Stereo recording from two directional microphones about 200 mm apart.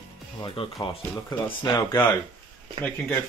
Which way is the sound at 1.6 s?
15° left (ahead or behind).